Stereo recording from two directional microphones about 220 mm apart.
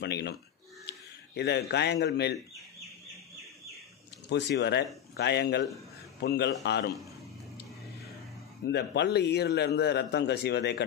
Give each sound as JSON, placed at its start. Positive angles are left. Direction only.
{"t": 0.0, "sound": "a man's voice", "side_deg": 50}
{"t": 4.3, "sound": "a man's voice", "side_deg": 50}
{"t": 8.6, "sound": "a man's voice", "side_deg": 50}